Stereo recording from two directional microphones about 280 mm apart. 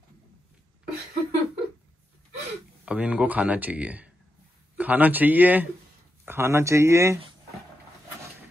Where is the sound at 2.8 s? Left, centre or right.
Centre.